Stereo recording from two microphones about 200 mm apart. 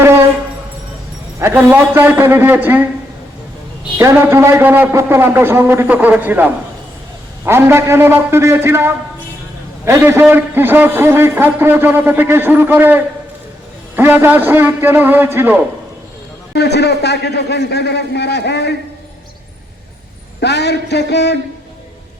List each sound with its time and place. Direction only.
1.4 s a man's voice: 10° right (ahead or behind)
3.9 s a man's voice: 15° right (ahead or behind)
16.5 s a man's voice: 55° left (ahead or behind)
20.4 s a man's voice: 55° left (ahead or behind)